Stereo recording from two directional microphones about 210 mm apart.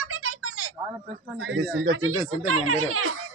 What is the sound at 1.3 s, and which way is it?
Speech, 65° right (ahead or behind).